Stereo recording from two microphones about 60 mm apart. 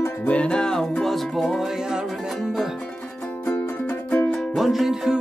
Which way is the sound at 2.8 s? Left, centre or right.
Centre.